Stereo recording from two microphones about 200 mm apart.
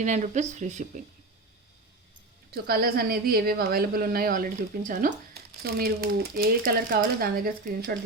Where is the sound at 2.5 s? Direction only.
50° right (ahead or behind).